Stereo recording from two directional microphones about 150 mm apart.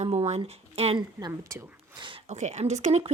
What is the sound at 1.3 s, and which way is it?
Speech, 20° right (ahead or behind).